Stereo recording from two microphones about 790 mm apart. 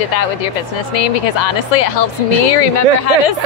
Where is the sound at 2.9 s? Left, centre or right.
Left.